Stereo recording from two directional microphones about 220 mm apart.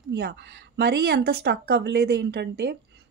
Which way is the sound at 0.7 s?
45° right (ahead or behind).